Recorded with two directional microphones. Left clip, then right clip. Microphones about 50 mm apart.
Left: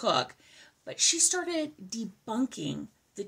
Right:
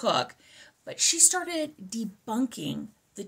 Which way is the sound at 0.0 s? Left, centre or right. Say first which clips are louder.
Right 1 dB; right.